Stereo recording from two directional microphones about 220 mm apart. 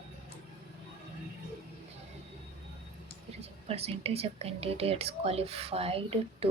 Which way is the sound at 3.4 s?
25° right (ahead or behind).